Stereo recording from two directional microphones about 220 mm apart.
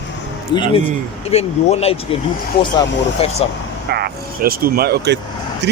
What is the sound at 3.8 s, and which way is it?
Speech, 45° right (ahead or behind).